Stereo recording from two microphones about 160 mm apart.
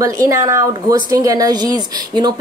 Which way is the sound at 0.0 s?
20° right (ahead or behind).